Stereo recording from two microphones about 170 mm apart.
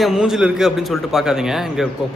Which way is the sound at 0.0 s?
Centre (ahead or behind).